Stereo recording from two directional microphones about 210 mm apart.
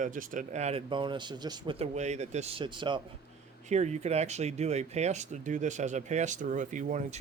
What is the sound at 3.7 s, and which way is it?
Speech, 35° right (ahead or behind).